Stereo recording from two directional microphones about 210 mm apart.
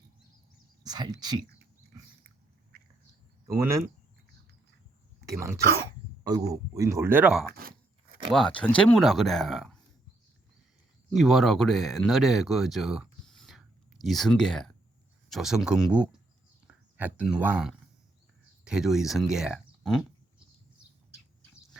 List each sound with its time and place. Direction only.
0.9 s speech: 20° right (ahead or behind)
2.7 s bird: 50° right (ahead or behind)
3.6 s speech: 15° right (ahead or behind)
5.2 s speech: 15° right (ahead or behind)
8.3 s speech: 5° left (ahead or behind)
11.1 s speech: centre (ahead or behind)
16.6 s a sound: 10° right (ahead or behind)
17.2 s speech: 5° right (ahead or behind)